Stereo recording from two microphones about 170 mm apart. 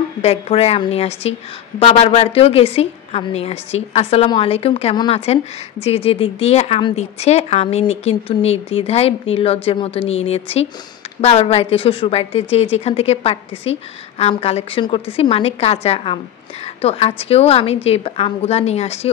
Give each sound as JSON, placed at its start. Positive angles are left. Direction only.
{"t": 0.2, "sound": "a woman's voice", "side_deg": 35}